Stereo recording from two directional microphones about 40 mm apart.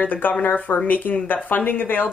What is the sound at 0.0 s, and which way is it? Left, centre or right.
Speech, left.